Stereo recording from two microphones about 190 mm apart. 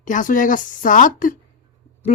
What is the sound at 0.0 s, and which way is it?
A woman's voice, 45° left (ahead or behind).